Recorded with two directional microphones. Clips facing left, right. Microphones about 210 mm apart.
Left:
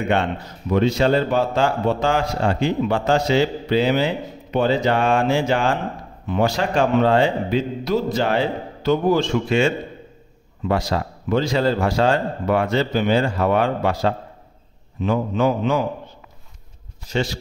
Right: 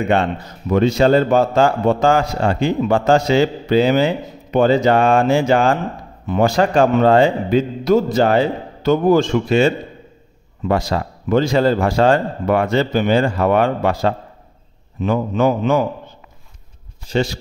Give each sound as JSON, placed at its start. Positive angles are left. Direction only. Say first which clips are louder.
{"t": 0.7, "sound": "a man's voice", "louder": "right 4 dB", "side_deg": -45}
{"t": 11.2, "sound": "a man's voice", "louder": "right 5 dB", "side_deg": -50}
{"t": 15.0, "sound": "a man's voice", "louder": "right 3 dB", "side_deg": -50}
{"t": 17.1, "sound": "a man's voice", "louder": "right 4 dB", "side_deg": -30}